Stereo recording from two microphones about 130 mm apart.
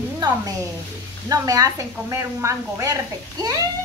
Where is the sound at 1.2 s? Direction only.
25° right (ahead or behind).